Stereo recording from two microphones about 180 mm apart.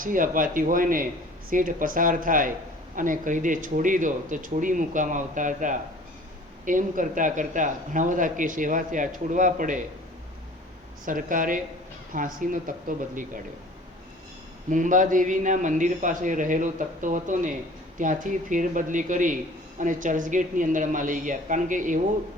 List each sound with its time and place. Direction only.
0.0 s speech: 50° right (ahead or behind)
11.0 s speech: 50° right (ahead or behind)
14.7 s speech: 45° right (ahead or behind)